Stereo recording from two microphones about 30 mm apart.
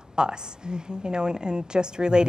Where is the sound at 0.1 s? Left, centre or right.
Right.